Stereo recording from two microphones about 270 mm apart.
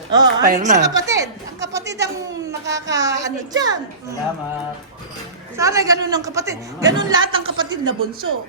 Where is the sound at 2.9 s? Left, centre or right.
Centre.